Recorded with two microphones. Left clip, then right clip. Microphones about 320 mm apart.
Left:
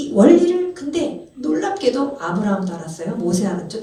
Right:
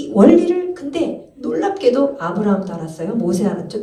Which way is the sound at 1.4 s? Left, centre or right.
Centre.